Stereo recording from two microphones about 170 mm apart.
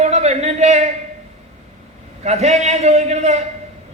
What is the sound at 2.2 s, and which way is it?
A man's voice, 40° right (ahead or behind).